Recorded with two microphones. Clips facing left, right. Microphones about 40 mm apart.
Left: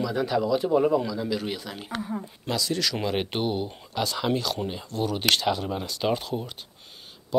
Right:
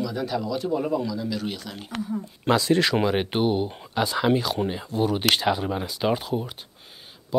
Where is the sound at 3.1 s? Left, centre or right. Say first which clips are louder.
Right 4 dB; centre.